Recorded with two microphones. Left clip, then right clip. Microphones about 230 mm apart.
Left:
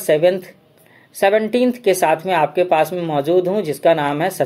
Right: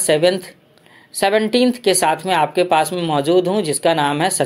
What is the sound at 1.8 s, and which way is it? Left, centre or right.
Speech, centre.